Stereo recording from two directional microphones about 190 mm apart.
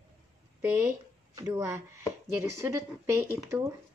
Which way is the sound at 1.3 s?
15° right (ahead or behind).